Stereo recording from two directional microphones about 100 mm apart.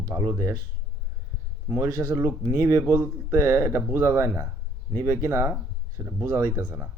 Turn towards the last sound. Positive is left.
turn(degrees=-15)  # may be behind; listen again after turning